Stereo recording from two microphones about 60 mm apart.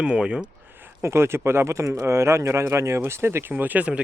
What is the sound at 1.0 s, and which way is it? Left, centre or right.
Speech, right.